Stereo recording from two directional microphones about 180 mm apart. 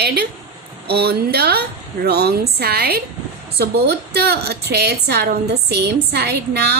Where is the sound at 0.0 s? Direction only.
65° right (ahead or behind).